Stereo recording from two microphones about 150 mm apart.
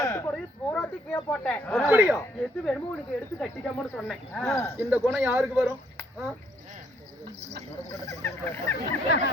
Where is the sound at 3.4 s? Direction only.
5° left (ahead or behind).